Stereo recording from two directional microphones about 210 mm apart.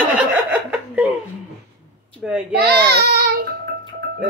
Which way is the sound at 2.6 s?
50° right (ahead or behind).